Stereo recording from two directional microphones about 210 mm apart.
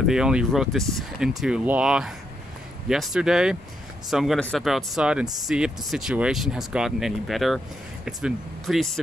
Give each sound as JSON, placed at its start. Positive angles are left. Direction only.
{"t": 0.0, "sound": "speech", "side_deg": -5}